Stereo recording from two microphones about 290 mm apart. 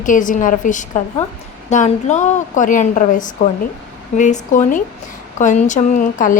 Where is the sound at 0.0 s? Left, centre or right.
Left.